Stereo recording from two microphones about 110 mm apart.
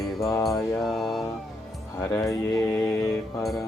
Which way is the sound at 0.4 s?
Centre (ahead or behind).